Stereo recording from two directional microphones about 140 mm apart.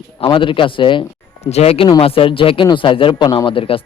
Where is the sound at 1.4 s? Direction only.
50° left (ahead or behind).